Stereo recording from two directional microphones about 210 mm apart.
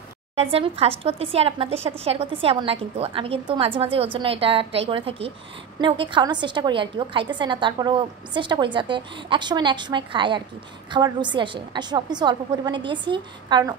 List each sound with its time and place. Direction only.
0.4 s a woman's voice: 30° right (ahead or behind)